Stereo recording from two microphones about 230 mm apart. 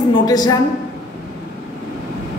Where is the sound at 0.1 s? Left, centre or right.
Centre.